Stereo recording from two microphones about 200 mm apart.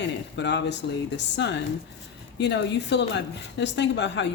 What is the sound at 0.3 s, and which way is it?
A woman's voice, 60° left (ahead or behind).